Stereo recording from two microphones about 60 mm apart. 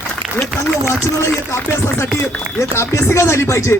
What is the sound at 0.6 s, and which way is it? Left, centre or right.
Speech, left.